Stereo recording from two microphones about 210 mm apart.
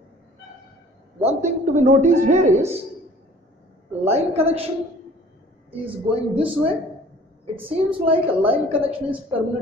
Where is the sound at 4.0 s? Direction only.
30° right (ahead or behind).